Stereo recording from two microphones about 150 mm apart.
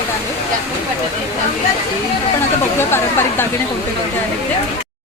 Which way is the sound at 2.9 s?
15° left (ahead or behind).